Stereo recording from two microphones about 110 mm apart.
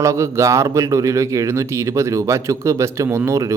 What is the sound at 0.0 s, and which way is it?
Speech, 25° right (ahead or behind).